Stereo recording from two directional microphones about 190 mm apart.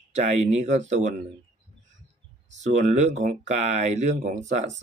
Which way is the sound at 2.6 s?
40° right (ahead or behind).